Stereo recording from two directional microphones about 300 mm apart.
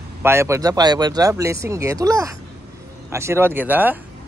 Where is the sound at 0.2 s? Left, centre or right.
Centre.